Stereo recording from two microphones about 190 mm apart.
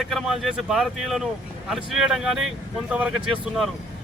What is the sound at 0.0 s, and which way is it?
Speech, centre (ahead or behind).